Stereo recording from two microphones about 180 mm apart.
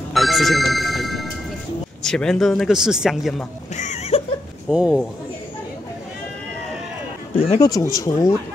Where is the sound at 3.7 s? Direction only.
40° left (ahead or behind).